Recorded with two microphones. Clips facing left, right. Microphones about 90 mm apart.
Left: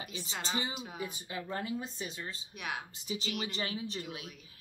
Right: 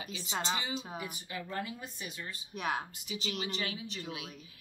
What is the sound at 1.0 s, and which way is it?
Speech, 25° left (ahead or behind).